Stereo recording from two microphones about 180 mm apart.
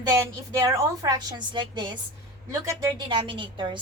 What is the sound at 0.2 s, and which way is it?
A woman's voice, 15° right (ahead or behind).